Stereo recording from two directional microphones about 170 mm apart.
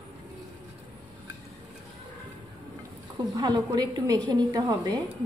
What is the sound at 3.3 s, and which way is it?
A woman's voice, 25° right (ahead or behind).